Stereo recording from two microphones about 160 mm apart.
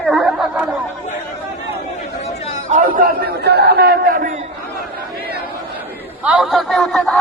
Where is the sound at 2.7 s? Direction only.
60° right (ahead or behind).